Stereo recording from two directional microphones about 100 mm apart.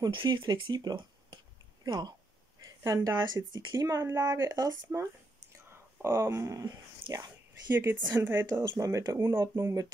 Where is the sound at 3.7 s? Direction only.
30° right (ahead or behind).